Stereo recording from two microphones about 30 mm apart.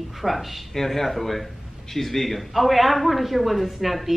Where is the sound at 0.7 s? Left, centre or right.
Centre.